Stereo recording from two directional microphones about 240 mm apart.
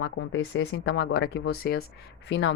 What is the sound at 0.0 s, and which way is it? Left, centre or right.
Speech, left.